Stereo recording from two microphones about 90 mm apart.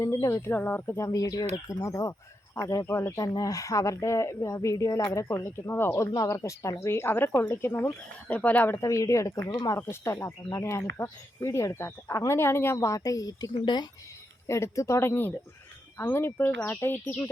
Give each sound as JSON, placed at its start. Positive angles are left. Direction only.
{"t": 0.0, "sound": "speech", "side_deg": 30}
{"t": 0.5, "sound": "speech", "side_deg": 25}
{"t": 3.3, "sound": "speech", "side_deg": 40}
{"t": 6.1, "sound": "speech", "side_deg": 40}
{"t": 8.3, "sound": "speech", "side_deg": 15}
{"t": 8.8, "sound": "speech", "side_deg": 35}
{"t": 9.9, "sound": "speech", "side_deg": 30}
{"t": 13.5, "sound": "speech", "side_deg": 55}
{"t": 14.4, "sound": "speech", "side_deg": 30}